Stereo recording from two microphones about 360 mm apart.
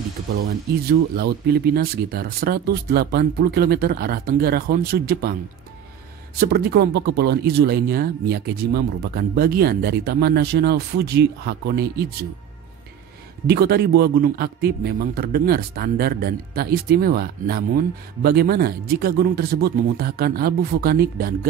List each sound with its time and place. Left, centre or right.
0.4 s speech: right
6.4 s speech: right
13.5 s speech: right